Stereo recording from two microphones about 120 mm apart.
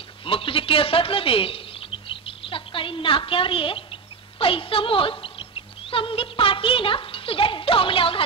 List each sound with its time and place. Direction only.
0.2 s speech: 50° left (ahead or behind)